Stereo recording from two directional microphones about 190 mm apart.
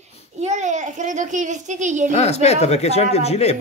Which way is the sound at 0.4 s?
35° right (ahead or behind).